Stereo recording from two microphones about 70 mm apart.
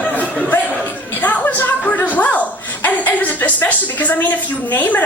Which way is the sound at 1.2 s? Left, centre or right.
Left.